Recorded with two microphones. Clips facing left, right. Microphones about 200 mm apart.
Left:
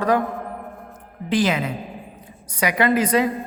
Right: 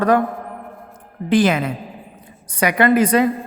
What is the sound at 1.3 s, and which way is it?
A woman's voice, 55° right (ahead or behind).